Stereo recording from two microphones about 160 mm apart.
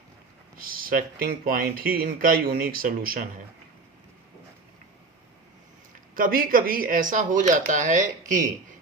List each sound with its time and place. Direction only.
0.6 s speech: 65° right (ahead or behind)
6.1 s speech: 60° right (ahead or behind)